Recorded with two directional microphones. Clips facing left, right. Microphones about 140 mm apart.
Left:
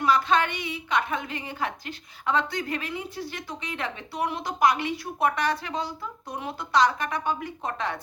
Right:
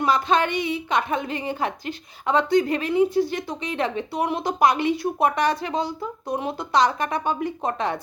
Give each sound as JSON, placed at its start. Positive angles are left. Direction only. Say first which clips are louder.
{"t": 0.0, "sound": "a woman's voice", "louder": "right 2 dB", "side_deg": -20}